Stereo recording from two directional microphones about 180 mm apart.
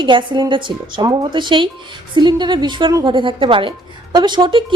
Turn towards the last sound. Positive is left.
turn(degrees=-25)  # may be behind; listen again after turning